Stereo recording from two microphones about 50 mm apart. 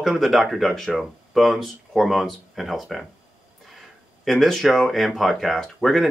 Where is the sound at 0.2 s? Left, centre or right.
Centre.